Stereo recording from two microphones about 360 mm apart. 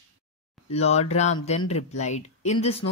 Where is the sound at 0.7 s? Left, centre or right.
Centre.